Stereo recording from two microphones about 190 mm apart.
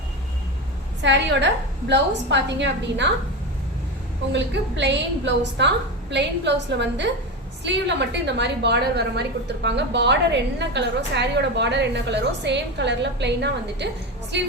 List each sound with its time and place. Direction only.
1.0 s a woman's voice: 70° right (ahead or behind)
4.3 s a woman's voice: 65° right (ahead or behind)